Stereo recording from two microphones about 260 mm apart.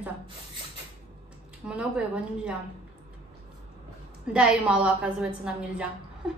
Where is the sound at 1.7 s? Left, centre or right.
Centre.